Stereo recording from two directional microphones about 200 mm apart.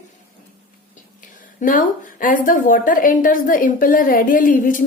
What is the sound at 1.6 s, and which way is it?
A woman's voice, 40° left (ahead or behind).